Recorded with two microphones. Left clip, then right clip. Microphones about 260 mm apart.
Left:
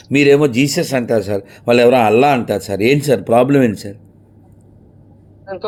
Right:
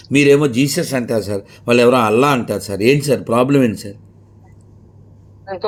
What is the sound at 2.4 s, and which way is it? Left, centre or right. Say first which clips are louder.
Speech: left 1 dB; centre.